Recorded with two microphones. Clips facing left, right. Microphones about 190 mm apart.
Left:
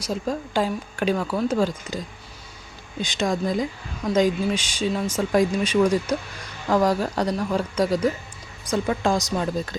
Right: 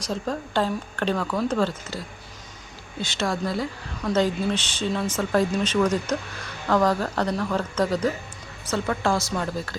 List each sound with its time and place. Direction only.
0.0 s speech: 10° left (ahead or behind)